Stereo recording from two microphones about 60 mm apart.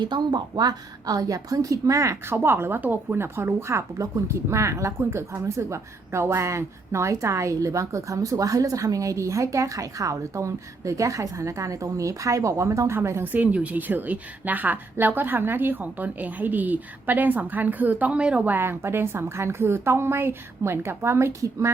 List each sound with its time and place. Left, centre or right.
0.6 s a woman's voice: right
2.2 s speech: right
3.3 s a woman's voice: right
4.4 s a woman's voice: right
13.2 s a woman's voice: right
18.4 s a woman's voice: right